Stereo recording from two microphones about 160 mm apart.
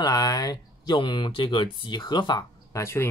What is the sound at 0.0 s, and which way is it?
Speech, 25° left (ahead or behind).